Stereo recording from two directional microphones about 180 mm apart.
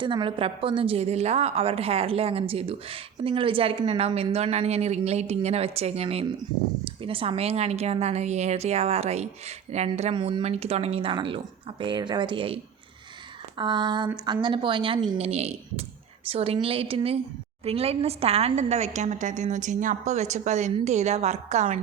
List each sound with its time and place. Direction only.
0.0 s a woman's voice: 25° right (ahead or behind)
13.6 s a woman's voice: 25° right (ahead or behind)